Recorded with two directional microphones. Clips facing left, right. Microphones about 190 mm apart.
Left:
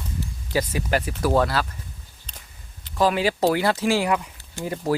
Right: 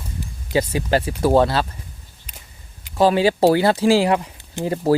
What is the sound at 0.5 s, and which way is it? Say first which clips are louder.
Speech: right 4 dB; 30° right (ahead or behind).